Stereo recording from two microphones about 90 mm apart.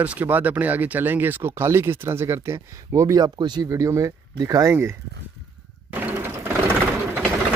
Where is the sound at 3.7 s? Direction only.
35° right (ahead or behind).